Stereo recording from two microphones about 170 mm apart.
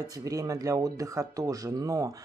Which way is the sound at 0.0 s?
20° right (ahead or behind).